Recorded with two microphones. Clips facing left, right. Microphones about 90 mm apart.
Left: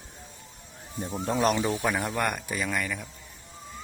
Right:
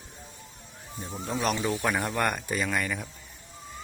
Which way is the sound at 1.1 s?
45° left (ahead or behind).